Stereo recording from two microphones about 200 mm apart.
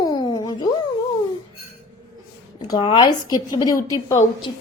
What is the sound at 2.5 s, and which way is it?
A woman's voice, 20° left (ahead or behind).